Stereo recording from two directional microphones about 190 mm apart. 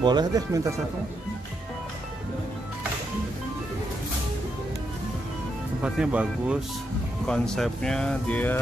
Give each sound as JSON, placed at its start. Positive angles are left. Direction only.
{"t": 0.0, "sound": "speech", "side_deg": -20}
{"t": 5.8, "sound": "speech", "side_deg": -5}